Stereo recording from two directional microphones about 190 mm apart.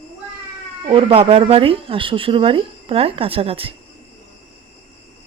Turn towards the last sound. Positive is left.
turn(degrees=-30)  # may be behind; listen again after turning